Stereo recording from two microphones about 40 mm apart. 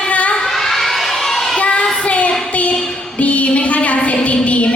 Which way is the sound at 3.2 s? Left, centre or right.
Left.